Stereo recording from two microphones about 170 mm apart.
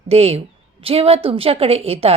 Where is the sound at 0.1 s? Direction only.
35° right (ahead or behind).